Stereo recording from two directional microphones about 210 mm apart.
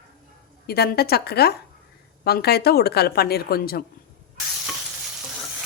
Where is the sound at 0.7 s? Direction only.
50° left (ahead or behind).